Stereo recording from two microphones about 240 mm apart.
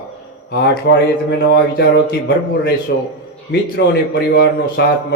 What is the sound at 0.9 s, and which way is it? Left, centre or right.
Speech, left.